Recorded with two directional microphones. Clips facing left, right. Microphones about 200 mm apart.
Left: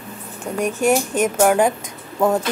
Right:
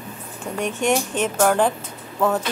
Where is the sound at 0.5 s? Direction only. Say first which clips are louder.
Left 3 dB; 5° left (ahead or behind).